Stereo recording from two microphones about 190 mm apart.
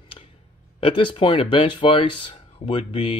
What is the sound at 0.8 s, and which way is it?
Speech, 30° left (ahead or behind).